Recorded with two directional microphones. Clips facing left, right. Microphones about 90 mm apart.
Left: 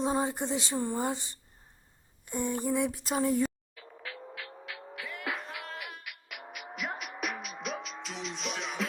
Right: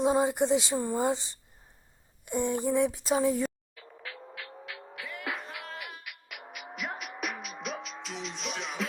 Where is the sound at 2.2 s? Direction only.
20° right (ahead or behind).